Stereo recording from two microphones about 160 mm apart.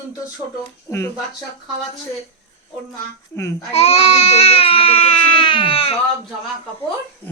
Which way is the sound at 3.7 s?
40° left (ahead or behind).